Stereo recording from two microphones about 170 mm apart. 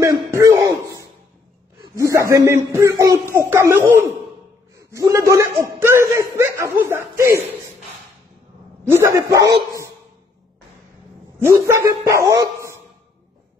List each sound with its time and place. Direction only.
0.0 s a sound: 20° right (ahead or behind)
1.8 s a man's voice: 20° right (ahead or behind)
8.9 s speech: 15° right (ahead or behind)
11.3 s speech: 15° right (ahead or behind)